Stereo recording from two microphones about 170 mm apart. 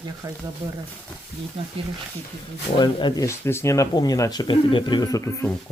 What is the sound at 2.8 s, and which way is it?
Speech, 25° left (ahead or behind).